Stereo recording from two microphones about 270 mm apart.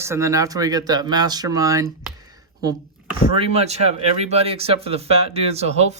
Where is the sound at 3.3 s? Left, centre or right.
Right.